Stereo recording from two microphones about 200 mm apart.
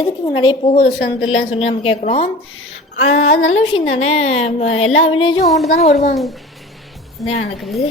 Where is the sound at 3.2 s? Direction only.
85° left.